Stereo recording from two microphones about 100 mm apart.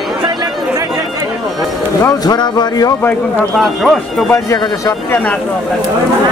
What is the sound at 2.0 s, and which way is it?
Speech, 40° left (ahead or behind).